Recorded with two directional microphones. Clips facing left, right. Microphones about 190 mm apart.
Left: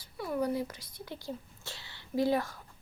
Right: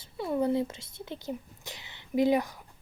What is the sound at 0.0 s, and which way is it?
Speech, 25° right (ahead or behind).